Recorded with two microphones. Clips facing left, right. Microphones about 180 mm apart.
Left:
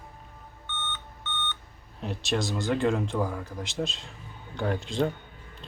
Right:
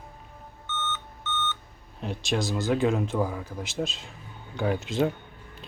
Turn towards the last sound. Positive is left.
turn(degrees=-5)  # may be behind; listen again after turning